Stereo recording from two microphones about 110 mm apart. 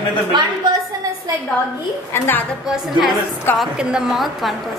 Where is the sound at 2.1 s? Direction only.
20° left (ahead or behind).